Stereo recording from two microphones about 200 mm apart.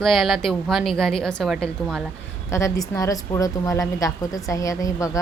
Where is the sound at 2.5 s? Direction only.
15° left (ahead or behind).